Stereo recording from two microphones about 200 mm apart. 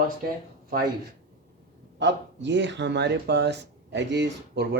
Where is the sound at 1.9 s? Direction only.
65° right (ahead or behind).